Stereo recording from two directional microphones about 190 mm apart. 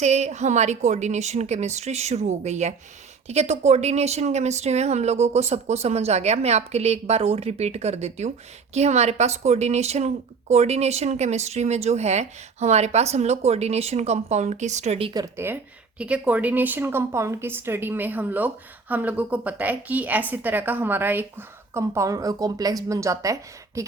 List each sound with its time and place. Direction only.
0.0 s a woman's voice: 35° right (ahead or behind); by 23.8 s 15° right (ahead or behind)